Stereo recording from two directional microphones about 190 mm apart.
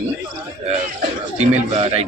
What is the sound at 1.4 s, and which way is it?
Speech, 35° right (ahead or behind).